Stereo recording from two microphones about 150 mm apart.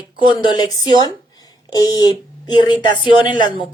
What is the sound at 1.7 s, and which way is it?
A woman's voice, 25° left (ahead or behind).